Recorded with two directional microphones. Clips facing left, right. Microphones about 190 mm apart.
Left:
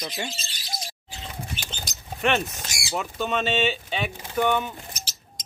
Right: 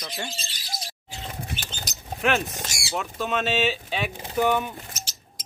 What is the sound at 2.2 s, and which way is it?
Speech, 5° right (ahead or behind).